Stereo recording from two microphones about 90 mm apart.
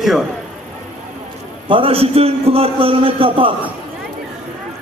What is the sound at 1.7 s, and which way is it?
A man's voice, 85° right.